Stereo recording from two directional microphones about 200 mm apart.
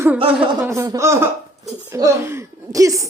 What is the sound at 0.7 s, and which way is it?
A woman's voice, 15° right (ahead or behind).